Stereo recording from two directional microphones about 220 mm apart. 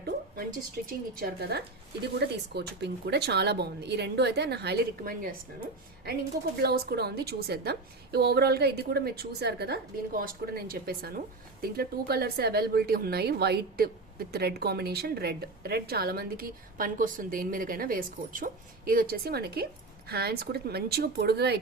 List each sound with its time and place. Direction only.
0.9 s speech: 40° right (ahead or behind)
6.6 s speech: 45° right (ahead or behind)